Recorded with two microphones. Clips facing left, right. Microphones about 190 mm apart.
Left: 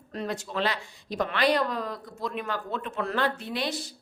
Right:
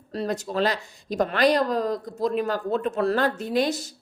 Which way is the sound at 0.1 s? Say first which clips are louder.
Right 5 dB; 35° right (ahead or behind).